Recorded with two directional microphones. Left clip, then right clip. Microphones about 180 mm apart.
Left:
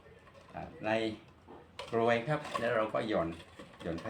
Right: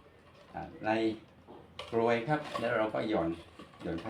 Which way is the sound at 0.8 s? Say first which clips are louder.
Right 2 dB; 20° left (ahead or behind).